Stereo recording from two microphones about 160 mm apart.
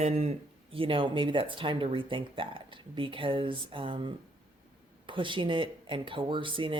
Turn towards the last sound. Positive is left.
turn(degrees=-30)  # may be behind; listen again after turning